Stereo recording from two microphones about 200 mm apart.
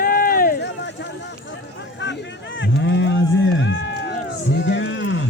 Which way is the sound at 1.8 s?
65° left (ahead or behind).